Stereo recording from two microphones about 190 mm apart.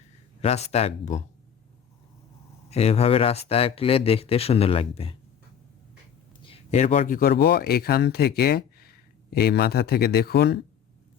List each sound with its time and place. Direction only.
0.4 s speech: 35° left (ahead or behind)
2.6 s speech: 35° left (ahead or behind)
6.4 s speech: 30° left (ahead or behind); by 10.6 s 55° left (ahead or behind)